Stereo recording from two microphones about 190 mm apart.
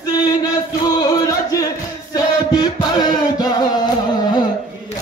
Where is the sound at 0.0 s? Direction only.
20° left (ahead or behind).